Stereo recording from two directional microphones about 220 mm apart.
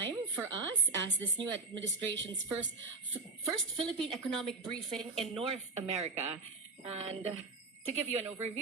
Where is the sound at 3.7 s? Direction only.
Centre (ahead or behind).